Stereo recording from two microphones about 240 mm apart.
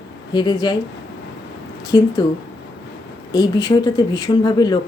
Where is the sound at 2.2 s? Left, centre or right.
Centre.